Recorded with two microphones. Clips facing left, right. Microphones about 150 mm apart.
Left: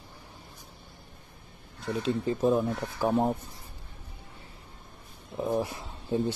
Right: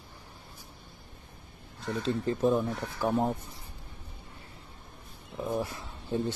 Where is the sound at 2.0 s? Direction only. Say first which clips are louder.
Left 1 dB; 5° left (ahead or behind).